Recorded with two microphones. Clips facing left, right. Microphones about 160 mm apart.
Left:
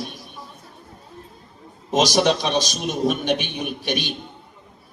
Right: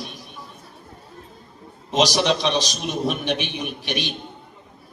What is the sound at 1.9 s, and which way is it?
Speech, 50° left (ahead or behind).